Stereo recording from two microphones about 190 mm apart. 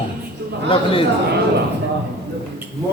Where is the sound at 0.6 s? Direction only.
30° left (ahead or behind).